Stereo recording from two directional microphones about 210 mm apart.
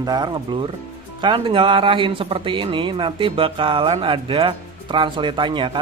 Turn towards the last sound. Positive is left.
turn(degrees=-25)  # may be behind; listen again after turning